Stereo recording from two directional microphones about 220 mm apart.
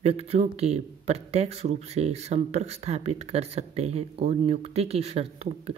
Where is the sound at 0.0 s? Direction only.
30° right (ahead or behind).